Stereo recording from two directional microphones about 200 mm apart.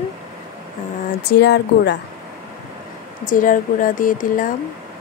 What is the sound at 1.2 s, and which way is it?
Speech, 55° left (ahead or behind).